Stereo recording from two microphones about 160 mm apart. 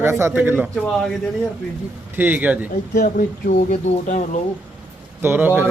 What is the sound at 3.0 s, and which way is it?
Speech, 55° left (ahead or behind).